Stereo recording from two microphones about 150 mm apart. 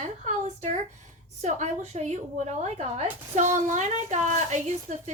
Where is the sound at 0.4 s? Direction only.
50° right (ahead or behind).